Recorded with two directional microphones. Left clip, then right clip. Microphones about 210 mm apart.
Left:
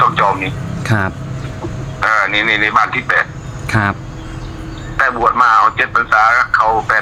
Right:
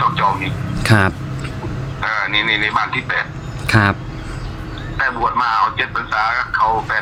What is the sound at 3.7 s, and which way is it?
Speech, 20° right (ahead or behind).